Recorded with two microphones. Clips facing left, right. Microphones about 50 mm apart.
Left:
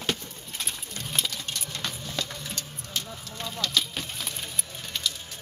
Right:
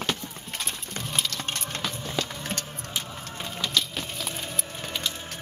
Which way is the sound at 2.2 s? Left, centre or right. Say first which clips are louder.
Right 3 dB; right.